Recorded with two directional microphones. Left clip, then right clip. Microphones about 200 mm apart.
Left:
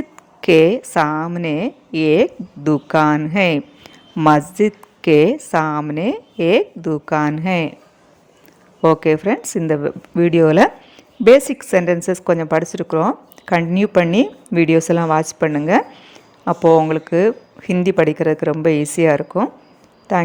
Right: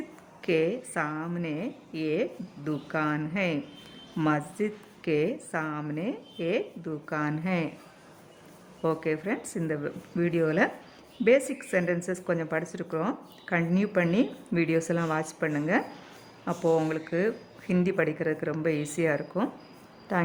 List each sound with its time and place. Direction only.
0.4 s a woman's voice: 40° left (ahead or behind)
8.8 s a woman's voice: 35° left (ahead or behind)